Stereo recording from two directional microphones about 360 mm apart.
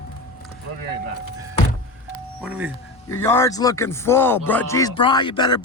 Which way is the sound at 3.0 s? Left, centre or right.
Centre.